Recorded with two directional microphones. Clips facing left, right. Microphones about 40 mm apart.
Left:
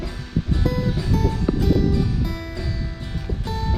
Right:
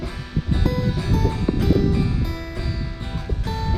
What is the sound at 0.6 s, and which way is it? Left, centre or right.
Music, centre.